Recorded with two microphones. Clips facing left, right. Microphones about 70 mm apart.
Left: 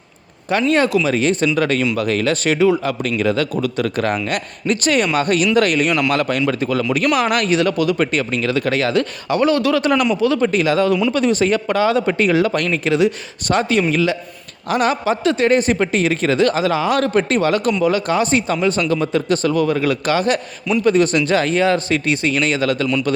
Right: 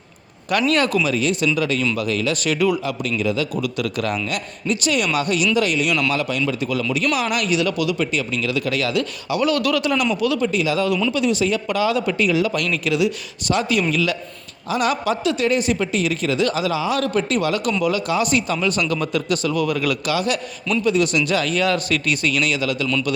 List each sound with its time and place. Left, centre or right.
0.5 s speech: left
1.0 s a man's voice: left
2.8 s a man's voice: left
3.6 s a man's voice: left
6.1 s a man's voice: left
9.8 s a man's voice: left
10.4 s a man's voice: left